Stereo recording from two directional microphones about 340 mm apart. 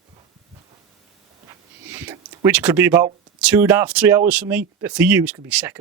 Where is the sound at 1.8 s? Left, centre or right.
Centre.